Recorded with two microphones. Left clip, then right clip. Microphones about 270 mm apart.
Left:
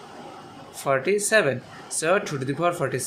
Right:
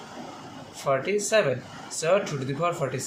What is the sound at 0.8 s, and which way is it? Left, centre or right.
Speech, left.